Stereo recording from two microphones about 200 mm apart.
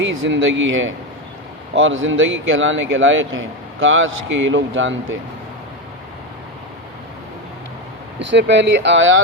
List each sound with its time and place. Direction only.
0.0 s speech: 75° right (ahead or behind)
8.3 s speech: 65° right (ahead or behind)